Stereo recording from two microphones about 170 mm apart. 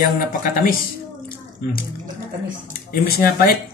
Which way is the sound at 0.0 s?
55° left (ahead or behind).